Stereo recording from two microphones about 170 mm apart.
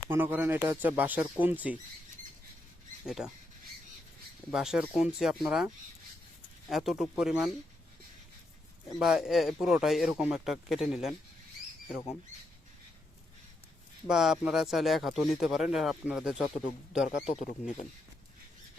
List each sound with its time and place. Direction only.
0.1 s speech: 10° right (ahead or behind)
3.1 s speech: 5° right (ahead or behind)
4.5 s speech: 5° right (ahead or behind)
6.7 s speech: centre (ahead or behind)
9.0 s speech: 5° right (ahead or behind)
14.1 s speech: centre (ahead or behind)
17.2 s speech: 40° left (ahead or behind)